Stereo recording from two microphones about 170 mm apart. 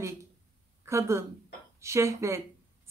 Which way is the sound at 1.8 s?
15° right (ahead or behind).